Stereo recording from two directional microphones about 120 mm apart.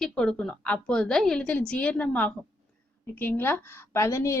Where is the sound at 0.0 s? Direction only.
5° left (ahead or behind).